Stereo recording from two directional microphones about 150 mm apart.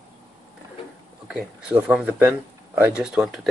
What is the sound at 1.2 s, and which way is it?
Speech, 5° right (ahead or behind).